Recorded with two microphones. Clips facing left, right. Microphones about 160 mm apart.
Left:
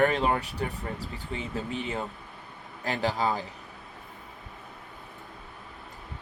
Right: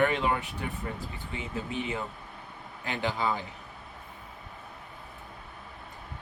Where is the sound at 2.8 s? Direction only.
35° left (ahead or behind).